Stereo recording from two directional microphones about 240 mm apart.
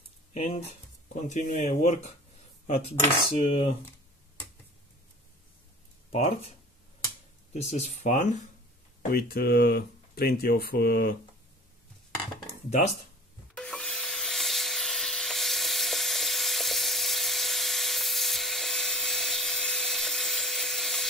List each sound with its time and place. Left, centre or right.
0.3 s speech: left
6.1 s speech: left
7.5 s speech: left
9.1 s speech: left
13.6 s wood: centre